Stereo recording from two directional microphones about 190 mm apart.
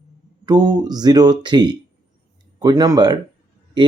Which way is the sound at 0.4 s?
20° right (ahead or behind).